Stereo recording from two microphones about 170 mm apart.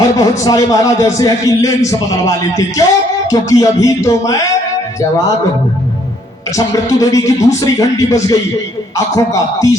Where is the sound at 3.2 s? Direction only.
20° left (ahead or behind).